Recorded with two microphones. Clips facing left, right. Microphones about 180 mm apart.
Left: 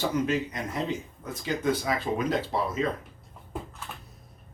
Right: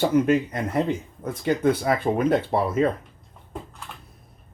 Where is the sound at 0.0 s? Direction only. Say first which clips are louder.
Right 7 dB; 55° right (ahead or behind).